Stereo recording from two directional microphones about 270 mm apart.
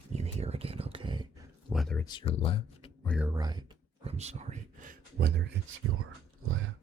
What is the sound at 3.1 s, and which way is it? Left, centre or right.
Speech, centre.